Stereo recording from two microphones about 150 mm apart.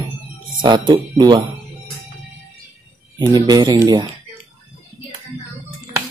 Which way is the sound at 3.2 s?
25° right (ahead or behind).